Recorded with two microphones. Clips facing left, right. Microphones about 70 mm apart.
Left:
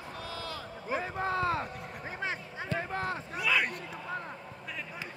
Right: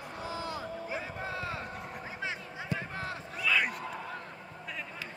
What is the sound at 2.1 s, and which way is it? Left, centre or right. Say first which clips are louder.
Basketball bounce: left 4 dB; left.